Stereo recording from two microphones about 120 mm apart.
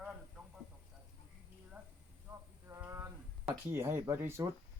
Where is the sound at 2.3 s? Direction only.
20° right (ahead or behind).